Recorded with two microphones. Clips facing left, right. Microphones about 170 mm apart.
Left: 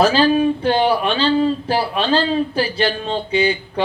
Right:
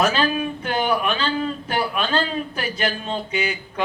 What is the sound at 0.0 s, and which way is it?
Speech, 30° left (ahead or behind).